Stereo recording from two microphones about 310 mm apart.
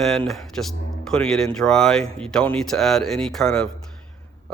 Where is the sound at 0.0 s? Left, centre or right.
Centre.